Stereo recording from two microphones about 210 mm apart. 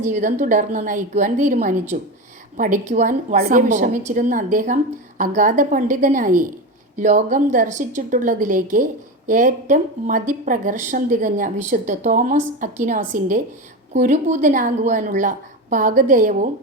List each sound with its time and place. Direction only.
0.0 s a woman's voice: 35° right (ahead or behind)